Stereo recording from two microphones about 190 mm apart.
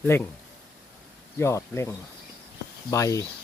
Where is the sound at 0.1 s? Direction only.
15° left (ahead or behind).